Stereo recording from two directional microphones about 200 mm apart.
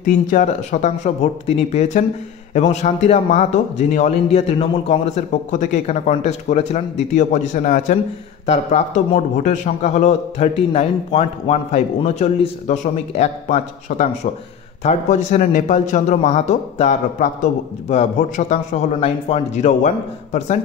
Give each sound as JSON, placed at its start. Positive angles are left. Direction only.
{"t": 0.0, "sound": "a man's voice", "side_deg": 40}